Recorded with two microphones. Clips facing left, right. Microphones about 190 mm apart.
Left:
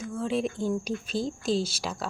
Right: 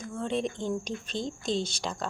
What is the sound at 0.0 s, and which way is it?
Speech, 5° left (ahead or behind).